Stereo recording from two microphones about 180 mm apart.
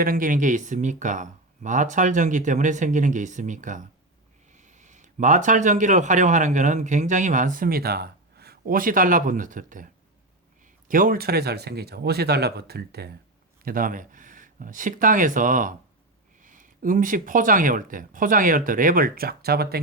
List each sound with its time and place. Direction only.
0.0 s speech: 50° right (ahead or behind)
13.7 s speech: 50° right (ahead or behind)